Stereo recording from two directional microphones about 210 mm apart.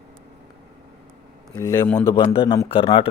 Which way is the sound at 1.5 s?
15° left (ahead or behind).